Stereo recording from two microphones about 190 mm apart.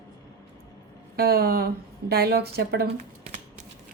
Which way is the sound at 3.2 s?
40° right (ahead or behind).